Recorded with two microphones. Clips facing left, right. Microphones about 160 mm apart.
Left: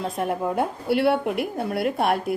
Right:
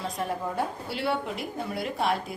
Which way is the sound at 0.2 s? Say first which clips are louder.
Left 6 dB; 60° left (ahead or behind).